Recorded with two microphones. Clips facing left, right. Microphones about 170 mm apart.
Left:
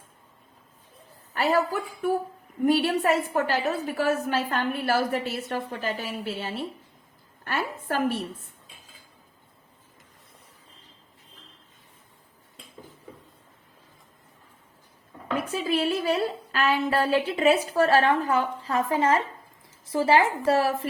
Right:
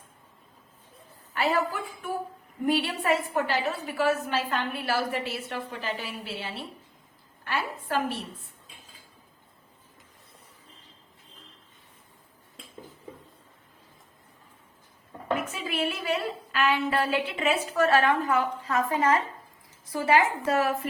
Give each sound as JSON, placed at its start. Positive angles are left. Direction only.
{"t": 1.3, "sound": "a woman's voice", "side_deg": 40}
{"t": 15.5, "sound": "a woman's voice", "side_deg": 35}